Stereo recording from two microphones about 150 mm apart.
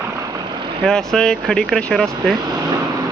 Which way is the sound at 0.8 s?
5° left (ahead or behind).